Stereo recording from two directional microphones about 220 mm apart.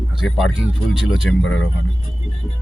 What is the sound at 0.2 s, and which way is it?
Speech, centre (ahead or behind).